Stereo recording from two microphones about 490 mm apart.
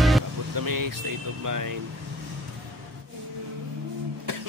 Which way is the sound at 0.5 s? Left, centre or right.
Right.